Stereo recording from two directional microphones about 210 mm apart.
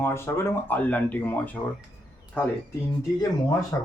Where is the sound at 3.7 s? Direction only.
10° left (ahead or behind).